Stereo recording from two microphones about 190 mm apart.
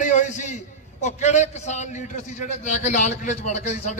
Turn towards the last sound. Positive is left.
turn(degrees=40)  # may be behind; listen again after turning